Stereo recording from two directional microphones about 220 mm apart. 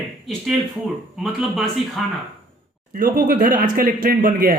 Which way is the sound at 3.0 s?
40° right (ahead or behind).